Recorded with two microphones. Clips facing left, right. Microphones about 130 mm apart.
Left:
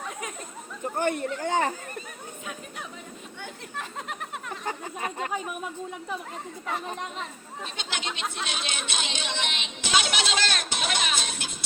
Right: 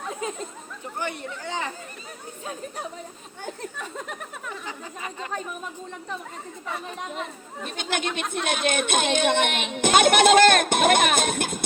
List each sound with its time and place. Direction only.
0.1 s chatter: 25° right (ahead or behind)
0.9 s speech: 50° left (ahead or behind)
4.6 s speech: 50° left (ahead or behind)
7.8 s speech: 50° right (ahead or behind)